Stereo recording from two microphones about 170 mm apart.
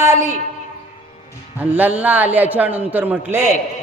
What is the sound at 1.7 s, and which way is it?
A man's voice, 10° right (ahead or behind).